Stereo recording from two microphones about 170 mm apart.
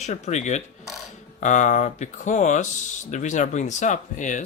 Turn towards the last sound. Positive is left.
turn(degrees=45)  # may be behind; listen again after turning